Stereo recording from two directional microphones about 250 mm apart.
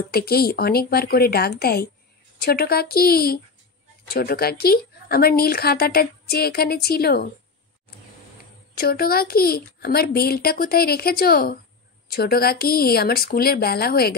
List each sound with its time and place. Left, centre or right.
0.1 s a woman's voice: left
8.7 s a woman's voice: left